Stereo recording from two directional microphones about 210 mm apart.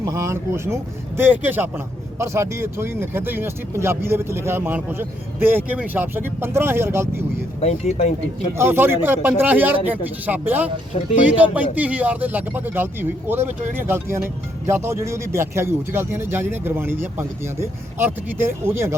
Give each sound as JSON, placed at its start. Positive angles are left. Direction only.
{"t": 0.0, "sound": "speech", "side_deg": -15}
{"t": 7.6, "sound": "speech", "side_deg": 30}
{"t": 8.5, "sound": "speech", "side_deg": -10}
{"t": 10.9, "sound": "speech", "side_deg": 25}
{"t": 11.5, "sound": "speech", "side_deg": -5}